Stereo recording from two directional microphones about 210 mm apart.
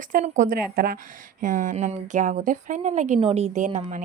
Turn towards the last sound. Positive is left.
turn(degrees=-35)  # may be behind; listen again after turning